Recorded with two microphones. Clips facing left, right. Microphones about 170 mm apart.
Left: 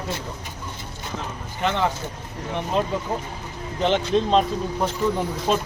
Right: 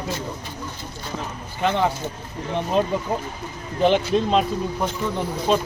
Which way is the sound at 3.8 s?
10° right (ahead or behind).